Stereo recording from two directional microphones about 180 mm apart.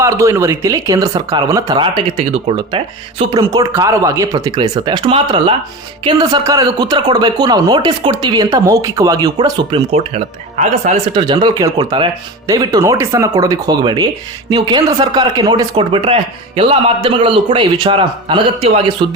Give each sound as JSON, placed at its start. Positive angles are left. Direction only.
{"t": 0.0, "sound": "speech", "side_deg": -15}
{"t": 11.1, "sound": "speech", "side_deg": -25}